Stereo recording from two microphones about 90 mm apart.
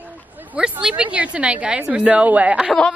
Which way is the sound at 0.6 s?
10° right (ahead or behind).